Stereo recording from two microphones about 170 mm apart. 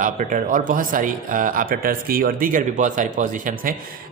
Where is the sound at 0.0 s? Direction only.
50° right (ahead or behind).